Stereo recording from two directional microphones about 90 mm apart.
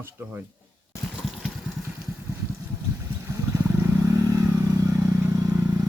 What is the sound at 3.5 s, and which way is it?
Vehicle, 35° right (ahead or behind).